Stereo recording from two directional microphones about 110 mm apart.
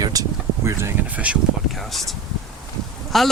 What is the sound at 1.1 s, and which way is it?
Speech, 10° right (ahead or behind).